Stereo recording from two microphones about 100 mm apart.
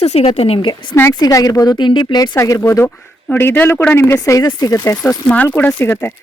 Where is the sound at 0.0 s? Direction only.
90° left.